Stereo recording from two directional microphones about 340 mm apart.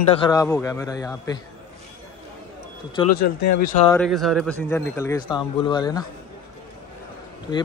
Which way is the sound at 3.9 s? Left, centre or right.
Centre.